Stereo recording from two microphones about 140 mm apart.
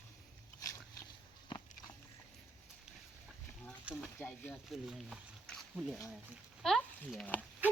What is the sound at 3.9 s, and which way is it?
Speech, 10° right (ahead or behind).